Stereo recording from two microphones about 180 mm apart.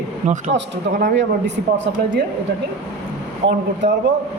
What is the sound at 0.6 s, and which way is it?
Speech, 75° right (ahead or behind).